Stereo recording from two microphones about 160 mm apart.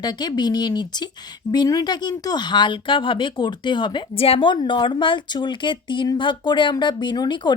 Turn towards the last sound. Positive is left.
turn(degrees=30)  # may be behind; listen again after turning